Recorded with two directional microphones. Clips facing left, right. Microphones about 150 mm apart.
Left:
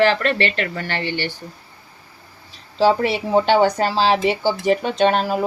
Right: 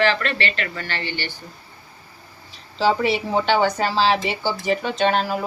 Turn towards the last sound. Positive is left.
turn(degrees=45)  # may be behind; listen again after turning